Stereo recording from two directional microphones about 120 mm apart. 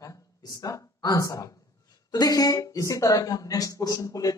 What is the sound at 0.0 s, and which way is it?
Speech, 30° left (ahead or behind).